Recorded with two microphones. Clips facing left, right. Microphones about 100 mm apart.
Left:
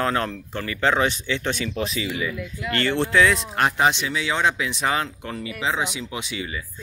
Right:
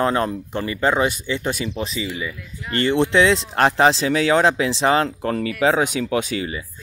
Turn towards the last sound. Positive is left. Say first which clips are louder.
# right 8 dB
turn(degrees=-40)  # may be behind; listen again after turning